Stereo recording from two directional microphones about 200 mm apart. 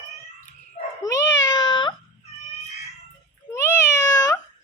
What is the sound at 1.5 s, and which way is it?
Baby cry, 20° left (ahead or behind).